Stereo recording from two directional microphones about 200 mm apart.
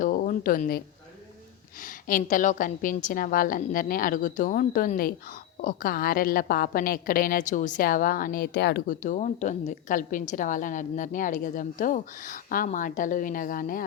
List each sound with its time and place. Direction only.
0.0 s a sound: 45° left (ahead or behind)
1.8 s a woman's voice: 45° left (ahead or behind)
9.0 s a woman's voice: 35° left (ahead or behind)